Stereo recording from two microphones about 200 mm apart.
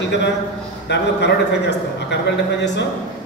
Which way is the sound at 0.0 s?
60° left (ahead or behind).